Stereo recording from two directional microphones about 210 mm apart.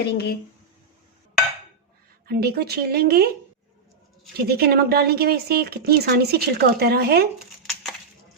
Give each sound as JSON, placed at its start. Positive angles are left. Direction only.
{"t": 0.0, "sound": "speech", "side_deg": 50}
{"t": 2.2, "sound": "speech", "side_deg": -50}
{"t": 4.4, "sound": "speech", "side_deg": -50}
{"t": 7.3, "sound": "a sound", "side_deg": 0}